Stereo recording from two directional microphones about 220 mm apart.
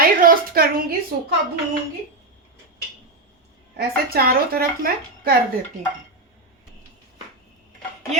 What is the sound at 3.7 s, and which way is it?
A woman's voice, 45° right (ahead or behind).